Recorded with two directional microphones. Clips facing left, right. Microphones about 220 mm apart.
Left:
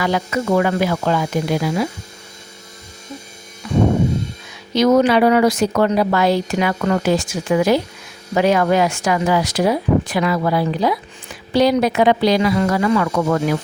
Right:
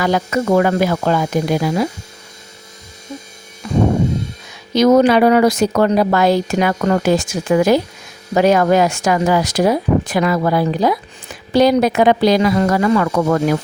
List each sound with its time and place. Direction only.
0.0 s speech: 45° right (ahead or behind)
4.7 s speech: 40° right (ahead or behind)